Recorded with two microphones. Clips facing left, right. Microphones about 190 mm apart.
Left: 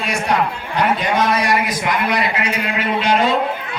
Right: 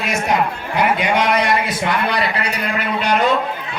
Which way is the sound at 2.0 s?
35° right (ahead or behind).